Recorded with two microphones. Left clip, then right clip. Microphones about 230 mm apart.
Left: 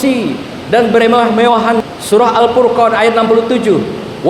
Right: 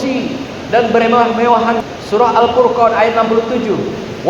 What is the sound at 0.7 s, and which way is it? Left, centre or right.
A man's voice, left.